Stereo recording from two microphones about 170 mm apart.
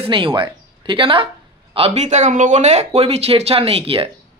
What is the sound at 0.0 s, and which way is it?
A man's voice, 30° right (ahead or behind).